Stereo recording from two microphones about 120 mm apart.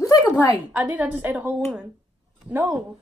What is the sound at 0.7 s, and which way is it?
A woman's voice, 10° right (ahead or behind).